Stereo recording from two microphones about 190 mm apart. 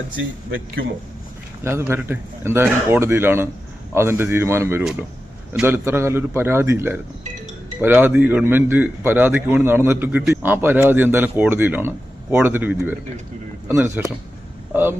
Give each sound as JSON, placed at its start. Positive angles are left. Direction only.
{"t": 0.2, "sound": "speech", "side_deg": -75}
{"t": 1.6, "sound": "a man's voice", "side_deg": -10}
{"t": 4.8, "sound": "a man's voice", "side_deg": -5}